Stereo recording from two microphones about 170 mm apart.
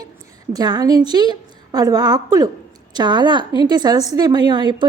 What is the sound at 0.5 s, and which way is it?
A woman's voice, 25° right (ahead or behind).